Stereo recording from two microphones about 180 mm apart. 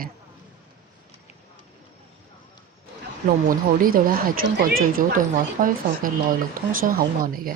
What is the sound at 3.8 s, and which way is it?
Speech, 50° right (ahead or behind).